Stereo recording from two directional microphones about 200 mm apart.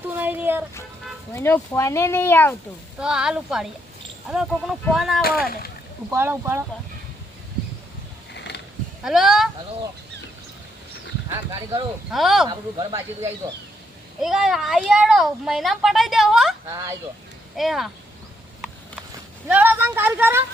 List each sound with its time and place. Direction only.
0.1 s a sound: 10° right (ahead or behind)
1.3 s speech: 15° left (ahead or behind)
3.0 s a woman's voice: 5° right (ahead or behind)
6.1 s speech: 10° right (ahead or behind)
8.3 s mechanisms: 55° left (ahead or behind)
9.0 s a woman's voice: centre (ahead or behind)
11.3 s speech: 20° right (ahead or behind)
12.1 s a woman's voice: centre (ahead or behind)
12.5 s speech: 20° right (ahead or behind)
14.2 s a woman's voice: centre (ahead or behind)
17.6 s a woman's voice: centre (ahead or behind)
19.5 s speech: 10° right (ahead or behind)